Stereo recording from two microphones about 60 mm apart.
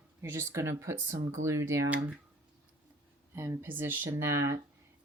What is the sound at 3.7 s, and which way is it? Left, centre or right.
Speech, right.